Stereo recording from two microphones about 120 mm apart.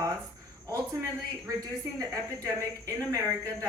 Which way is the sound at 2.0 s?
30° right (ahead or behind).